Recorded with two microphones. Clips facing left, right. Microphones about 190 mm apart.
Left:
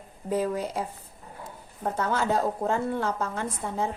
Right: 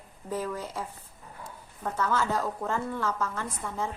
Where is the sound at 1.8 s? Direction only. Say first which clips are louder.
Left 2 dB; 30° left (ahead or behind).